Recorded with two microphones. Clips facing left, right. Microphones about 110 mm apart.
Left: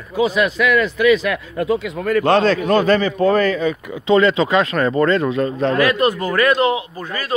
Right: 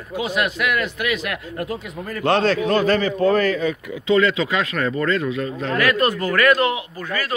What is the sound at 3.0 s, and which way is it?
Speech, 20° left (ahead or behind).